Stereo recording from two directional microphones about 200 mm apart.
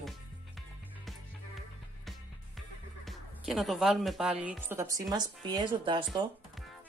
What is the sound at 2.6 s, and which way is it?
Speech, centre (ahead or behind).